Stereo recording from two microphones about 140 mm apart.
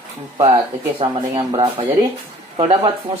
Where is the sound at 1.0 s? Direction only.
45° right (ahead or behind).